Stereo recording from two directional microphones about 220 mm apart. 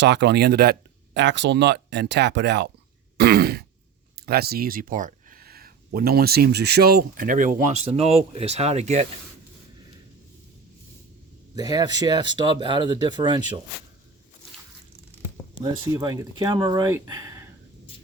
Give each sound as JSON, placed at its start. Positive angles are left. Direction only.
{"t": 0.0, "sound": "speech", "side_deg": -50}
{"t": 3.2, "sound": "throat clearing", "side_deg": -45}
{"t": 4.1, "sound": "speech", "side_deg": -45}
{"t": 11.5, "sound": "speech", "side_deg": -20}
{"t": 15.6, "sound": "speech", "side_deg": -20}